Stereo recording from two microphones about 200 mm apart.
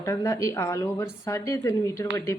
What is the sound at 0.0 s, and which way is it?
A woman's voice, 15° left (ahead or behind).